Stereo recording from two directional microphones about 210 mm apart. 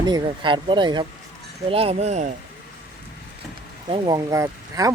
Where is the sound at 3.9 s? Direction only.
20° right (ahead or behind).